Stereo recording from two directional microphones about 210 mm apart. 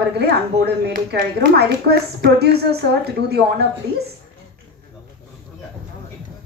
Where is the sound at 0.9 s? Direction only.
50° right (ahead or behind).